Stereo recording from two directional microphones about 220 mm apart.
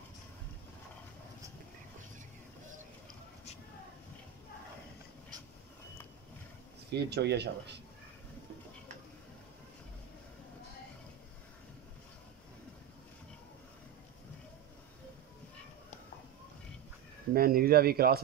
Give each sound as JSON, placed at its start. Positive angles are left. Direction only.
{"t": 6.9, "sound": "speech", "side_deg": -50}
{"t": 17.3, "sound": "speech", "side_deg": -40}